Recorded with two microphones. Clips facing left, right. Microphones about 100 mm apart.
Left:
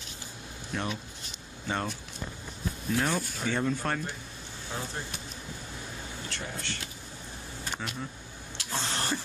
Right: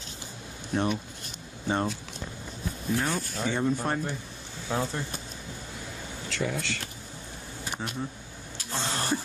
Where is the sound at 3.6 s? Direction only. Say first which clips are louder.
Right 2 dB; 20° right (ahead or behind).